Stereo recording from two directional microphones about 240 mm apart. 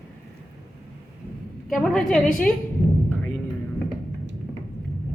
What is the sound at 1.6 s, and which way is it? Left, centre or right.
Speech, centre.